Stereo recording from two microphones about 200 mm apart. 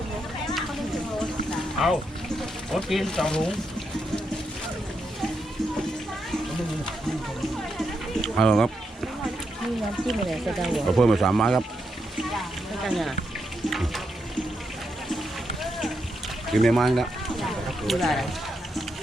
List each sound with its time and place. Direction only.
2.7 s speech: centre (ahead or behind)
8.4 s speech: 5° left (ahead or behind)
10.1 s speech: centre (ahead or behind)
12.8 s speech: centre (ahead or behind)
16.5 s speech: centre (ahead or behind)